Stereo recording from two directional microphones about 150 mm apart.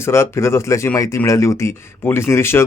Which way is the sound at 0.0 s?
15° left (ahead or behind).